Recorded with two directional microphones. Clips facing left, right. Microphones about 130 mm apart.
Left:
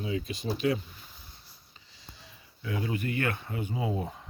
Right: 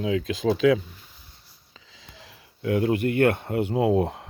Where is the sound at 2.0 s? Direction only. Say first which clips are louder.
Right 3 dB; 90° right; by 4.2 s 70° right (ahead or behind).